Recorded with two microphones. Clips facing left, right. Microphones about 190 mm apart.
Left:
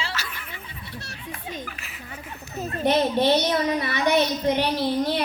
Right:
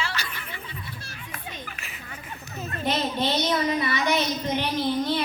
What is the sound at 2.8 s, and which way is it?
A woman's voice, 60° left (ahead or behind).